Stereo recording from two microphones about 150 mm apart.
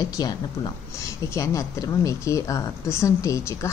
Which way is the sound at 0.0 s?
25° left (ahead or behind).